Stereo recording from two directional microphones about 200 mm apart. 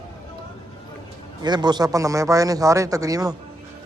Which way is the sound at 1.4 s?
20° right (ahead or behind).